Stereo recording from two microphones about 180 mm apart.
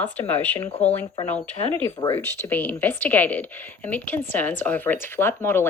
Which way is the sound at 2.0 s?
15° left (ahead or behind).